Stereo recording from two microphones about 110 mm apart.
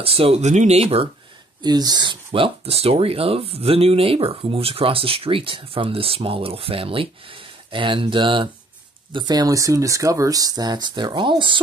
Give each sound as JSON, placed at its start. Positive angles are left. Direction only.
{"t": 0.0, "sound": "speech", "side_deg": -60}
{"t": 1.6, "sound": "speech", "side_deg": -40}
{"t": 2.3, "sound": "speech", "side_deg": -60}
{"t": 9.1, "sound": "speech", "side_deg": -35}